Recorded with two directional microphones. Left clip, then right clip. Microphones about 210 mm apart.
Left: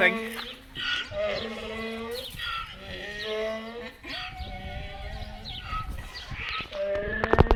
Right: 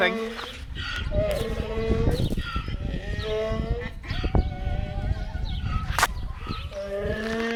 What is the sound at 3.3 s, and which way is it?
Livestock, 45° right (ahead or behind).